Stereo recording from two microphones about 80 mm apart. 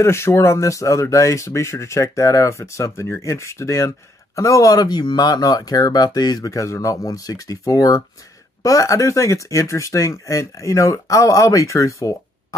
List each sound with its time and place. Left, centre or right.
0.0 s speech: left